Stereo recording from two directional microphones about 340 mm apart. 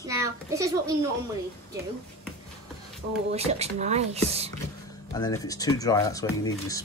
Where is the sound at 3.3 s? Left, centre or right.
Centre.